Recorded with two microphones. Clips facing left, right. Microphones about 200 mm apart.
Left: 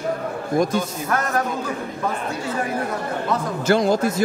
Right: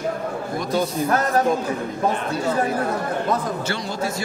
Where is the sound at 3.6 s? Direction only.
45° left (ahead or behind).